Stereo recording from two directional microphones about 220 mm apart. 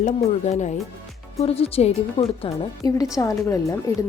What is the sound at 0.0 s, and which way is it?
A woman's voice, 30° left (ahead or behind).